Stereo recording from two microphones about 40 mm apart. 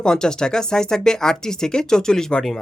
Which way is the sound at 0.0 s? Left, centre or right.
Centre.